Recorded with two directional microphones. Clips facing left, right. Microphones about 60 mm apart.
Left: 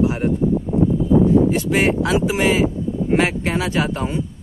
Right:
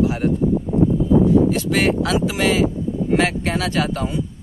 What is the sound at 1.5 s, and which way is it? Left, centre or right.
Speech, left.